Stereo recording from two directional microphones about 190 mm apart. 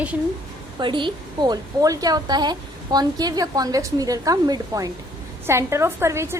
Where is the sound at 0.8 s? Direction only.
25° right (ahead or behind).